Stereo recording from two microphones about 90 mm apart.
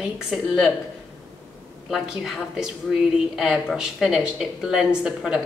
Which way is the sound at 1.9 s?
5° right (ahead or behind).